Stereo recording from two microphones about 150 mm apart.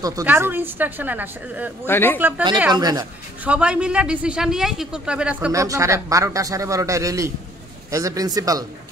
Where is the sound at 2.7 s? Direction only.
25° right (ahead or behind).